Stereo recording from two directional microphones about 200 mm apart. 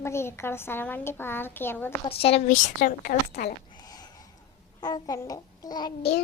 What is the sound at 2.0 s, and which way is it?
A woman's voice, 30° left (ahead or behind).